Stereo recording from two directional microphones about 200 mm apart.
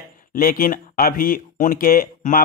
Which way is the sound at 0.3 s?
45° left (ahead or behind).